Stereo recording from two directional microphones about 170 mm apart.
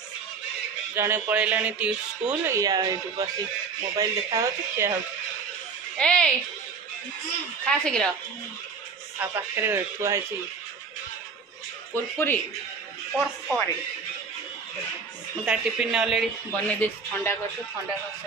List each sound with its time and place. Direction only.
0.9 s speech: 15° right (ahead or behind)
2.5 s speech: 20° right (ahead or behind)
5.9 s speech: 5° left (ahead or behind)
7.6 s speech: 5° left (ahead or behind)
9.2 s speech: 15° right (ahead or behind)
11.9 s a man's voice: 10° left (ahead or behind)
13.1 s speech: centre (ahead or behind)
15.4 s speech: 5° right (ahead or behind)
16.6 s a man's voice: 10° left (ahead or behind)